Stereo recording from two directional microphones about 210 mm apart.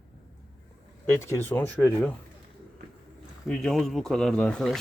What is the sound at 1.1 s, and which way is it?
Speech, 15° left (ahead or behind).